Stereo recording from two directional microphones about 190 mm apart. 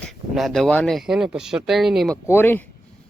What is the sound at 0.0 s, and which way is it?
Speech, centre (ahead or behind).